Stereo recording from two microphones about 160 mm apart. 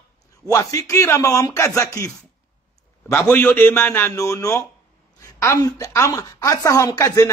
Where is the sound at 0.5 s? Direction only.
20° left (ahead or behind).